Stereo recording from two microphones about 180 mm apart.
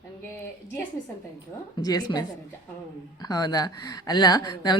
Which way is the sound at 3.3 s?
20° left (ahead or behind).